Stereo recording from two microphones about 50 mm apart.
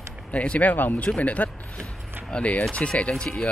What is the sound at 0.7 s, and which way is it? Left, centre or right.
Speech, left.